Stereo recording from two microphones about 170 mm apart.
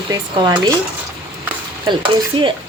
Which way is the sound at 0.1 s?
25° right (ahead or behind).